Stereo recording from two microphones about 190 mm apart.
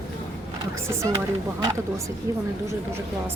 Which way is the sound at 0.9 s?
15° right (ahead or behind).